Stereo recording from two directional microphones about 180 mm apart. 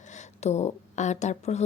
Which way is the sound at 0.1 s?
40° left (ahead or behind).